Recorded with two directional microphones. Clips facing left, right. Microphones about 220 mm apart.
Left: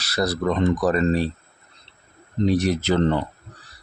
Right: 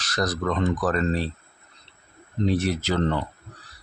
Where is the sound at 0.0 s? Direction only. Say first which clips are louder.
Left 3 dB; 10° left (ahead or behind).